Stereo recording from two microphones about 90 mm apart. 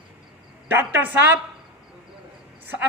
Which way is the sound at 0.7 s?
20° right (ahead or behind).